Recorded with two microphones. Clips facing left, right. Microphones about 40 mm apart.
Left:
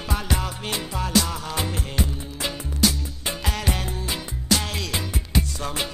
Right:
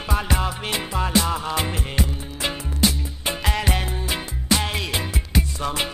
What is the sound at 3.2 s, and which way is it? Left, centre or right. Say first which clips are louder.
Music: right 3 dB; right.